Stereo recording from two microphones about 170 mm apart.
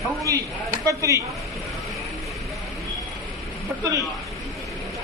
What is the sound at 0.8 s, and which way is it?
Speech, 20° right (ahead or behind).